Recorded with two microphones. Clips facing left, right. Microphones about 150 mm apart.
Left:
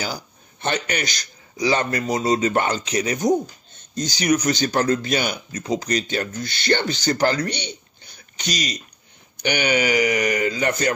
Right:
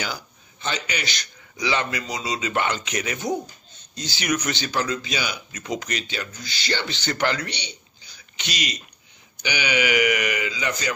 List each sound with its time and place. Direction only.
0.6 s a man's voice: 55° left (ahead or behind)
5.5 s a man's voice: 35° left (ahead or behind); by 8.5 s 55° left (ahead or behind)
8.5 s speech: 40° left (ahead or behind)
9.4 s a man's voice: 50° left (ahead or behind)